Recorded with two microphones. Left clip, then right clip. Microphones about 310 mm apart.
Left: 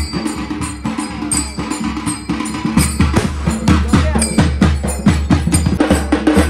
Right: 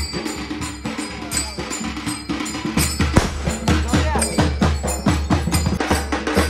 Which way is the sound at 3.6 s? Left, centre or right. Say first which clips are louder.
Left 4 dB; centre.